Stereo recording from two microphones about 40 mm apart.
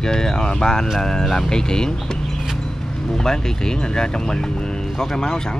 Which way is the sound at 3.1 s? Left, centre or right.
Centre.